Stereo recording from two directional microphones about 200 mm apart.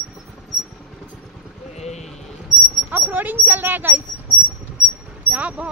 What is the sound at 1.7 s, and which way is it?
Clip-clop, 35° left (ahead or behind).